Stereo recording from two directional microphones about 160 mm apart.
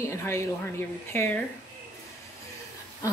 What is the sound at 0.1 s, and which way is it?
A woman's voice, 15° left (ahead or behind).